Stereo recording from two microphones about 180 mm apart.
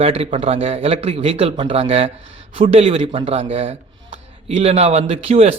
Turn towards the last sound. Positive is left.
turn(degrees=-35)  # may be behind; listen again after turning